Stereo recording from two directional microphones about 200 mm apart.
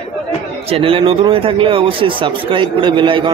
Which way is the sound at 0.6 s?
30° right (ahead or behind).